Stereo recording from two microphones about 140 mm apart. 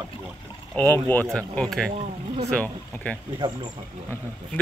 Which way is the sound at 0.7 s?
15° left (ahead or behind).